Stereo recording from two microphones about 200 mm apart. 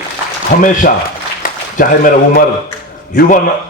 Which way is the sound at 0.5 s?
45° left (ahead or behind).